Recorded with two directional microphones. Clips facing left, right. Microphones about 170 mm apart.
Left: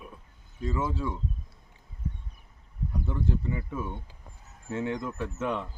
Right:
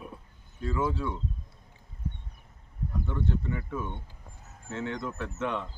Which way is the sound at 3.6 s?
5° left (ahead or behind).